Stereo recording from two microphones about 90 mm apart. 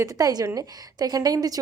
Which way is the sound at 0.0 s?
45° right (ahead or behind).